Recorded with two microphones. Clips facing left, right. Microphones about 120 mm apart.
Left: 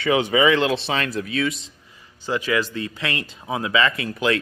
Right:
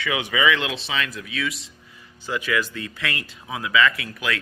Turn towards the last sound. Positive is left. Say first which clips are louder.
# left 6 dB
turn(degrees=30)  # may be behind; listen again after turning